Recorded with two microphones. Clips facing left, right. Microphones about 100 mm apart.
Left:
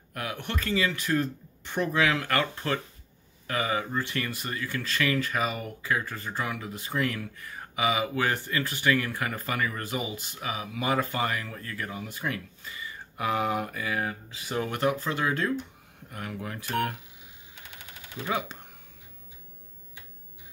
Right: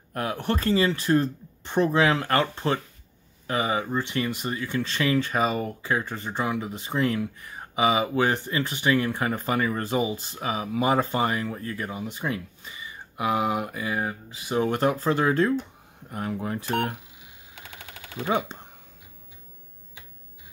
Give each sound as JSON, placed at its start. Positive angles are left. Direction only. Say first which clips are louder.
{"t": 0.1, "sound": "speech", "louder": "right 7 dB", "side_deg": -35}
{"t": 18.1, "sound": "speech", "louder": "right 5 dB", "side_deg": -30}